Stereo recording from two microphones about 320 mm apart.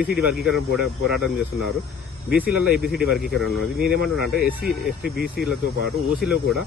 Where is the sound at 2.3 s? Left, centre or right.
Centre.